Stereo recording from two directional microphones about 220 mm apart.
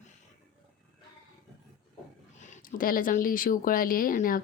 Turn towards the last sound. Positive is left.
turn(degrees=40)  # may be behind; listen again after turning